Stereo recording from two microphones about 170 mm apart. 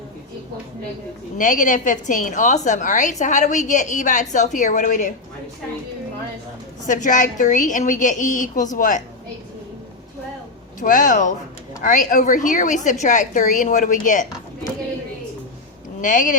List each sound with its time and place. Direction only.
1.4 s a woman's voice: 50° left (ahead or behind)
6.8 s a woman's voice: 50° left (ahead or behind)
10.8 s a woman's voice: 50° left (ahead or behind)
16.0 s speech: 50° left (ahead or behind)